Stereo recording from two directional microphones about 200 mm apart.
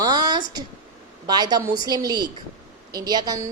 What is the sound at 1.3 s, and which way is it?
A woman's voice, 20° right (ahead or behind).